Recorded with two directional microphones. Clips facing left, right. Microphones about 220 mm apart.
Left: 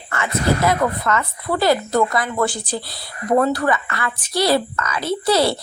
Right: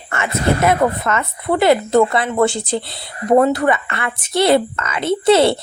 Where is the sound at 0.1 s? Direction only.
25° right (ahead or behind).